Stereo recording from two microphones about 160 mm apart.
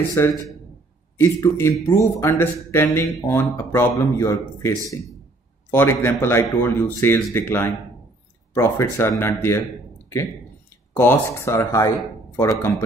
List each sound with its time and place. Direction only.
0.1 s a man's voice: 20° left (ahead or behind)
11.0 s a man's voice: 15° left (ahead or behind)